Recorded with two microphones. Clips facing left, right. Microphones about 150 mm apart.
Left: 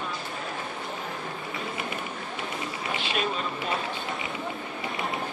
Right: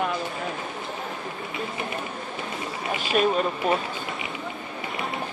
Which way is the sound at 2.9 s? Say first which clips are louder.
Right 8 dB; 45° right (ahead or behind).